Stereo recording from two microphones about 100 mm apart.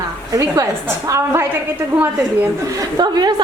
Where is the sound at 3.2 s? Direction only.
45° right (ahead or behind).